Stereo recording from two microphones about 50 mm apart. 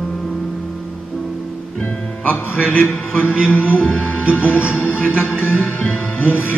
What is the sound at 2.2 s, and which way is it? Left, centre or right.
A man's voice, left.